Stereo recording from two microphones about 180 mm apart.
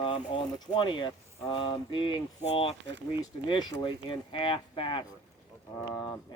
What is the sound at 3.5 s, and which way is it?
Speech, 25° left (ahead or behind).